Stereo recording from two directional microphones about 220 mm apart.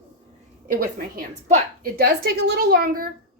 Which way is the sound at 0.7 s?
40° right (ahead or behind).